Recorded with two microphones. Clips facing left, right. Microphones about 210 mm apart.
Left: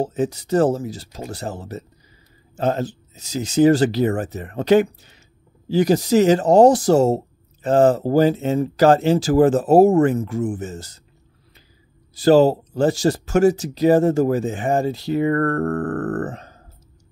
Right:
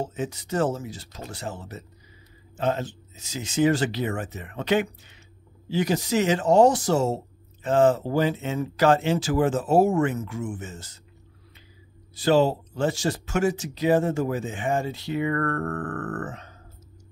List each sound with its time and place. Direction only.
0.0 s speech: 35° left (ahead or behind)
12.2 s speech: 40° left (ahead or behind)